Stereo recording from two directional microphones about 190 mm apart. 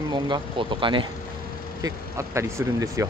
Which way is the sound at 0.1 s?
25° right (ahead or behind).